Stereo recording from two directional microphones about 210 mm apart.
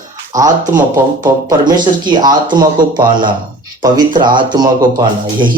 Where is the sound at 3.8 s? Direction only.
20° right (ahead or behind).